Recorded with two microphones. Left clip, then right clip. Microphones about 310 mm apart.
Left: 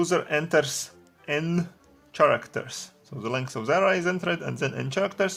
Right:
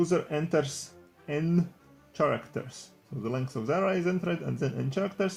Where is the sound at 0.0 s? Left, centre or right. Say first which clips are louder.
Left 4 dB; left.